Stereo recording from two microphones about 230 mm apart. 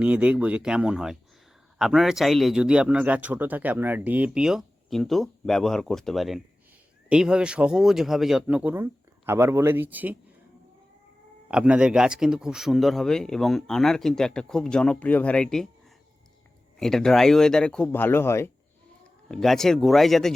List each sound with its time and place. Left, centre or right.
0.0 s speech: centre
11.4 s speech: centre
16.8 s speech: centre